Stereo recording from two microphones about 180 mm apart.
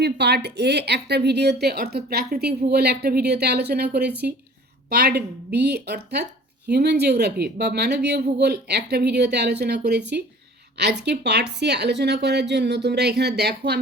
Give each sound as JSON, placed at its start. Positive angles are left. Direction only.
{"t": 0.0, "sound": "a woman's voice", "side_deg": -65}
{"t": 4.1, "sound": "speech", "side_deg": -10}
{"t": 4.9, "sound": "a woman's voice", "side_deg": -65}